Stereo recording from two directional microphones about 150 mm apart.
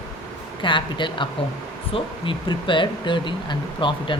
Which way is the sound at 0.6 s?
30° left (ahead or behind).